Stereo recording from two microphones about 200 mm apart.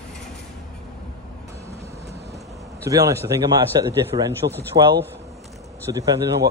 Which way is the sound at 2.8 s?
15° right (ahead or behind).